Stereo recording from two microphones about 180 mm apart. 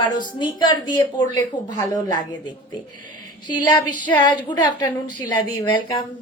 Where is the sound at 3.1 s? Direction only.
25° left (ahead or behind).